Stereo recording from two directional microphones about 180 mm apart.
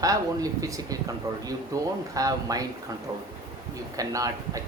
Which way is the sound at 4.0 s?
20° right (ahead or behind).